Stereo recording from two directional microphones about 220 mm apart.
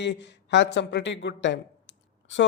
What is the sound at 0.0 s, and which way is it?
A man's voice, 55° left (ahead or behind).